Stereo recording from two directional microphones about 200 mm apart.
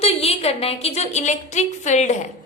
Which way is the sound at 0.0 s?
30° left (ahead or behind).